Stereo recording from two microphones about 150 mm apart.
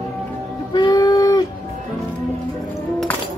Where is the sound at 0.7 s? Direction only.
30° left (ahead or behind).